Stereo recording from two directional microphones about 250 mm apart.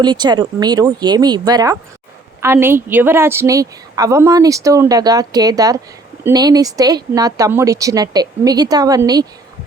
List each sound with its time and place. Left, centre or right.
0.0 s a woman's voice: centre